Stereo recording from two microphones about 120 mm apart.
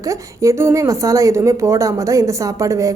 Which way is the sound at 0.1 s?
25° right (ahead or behind).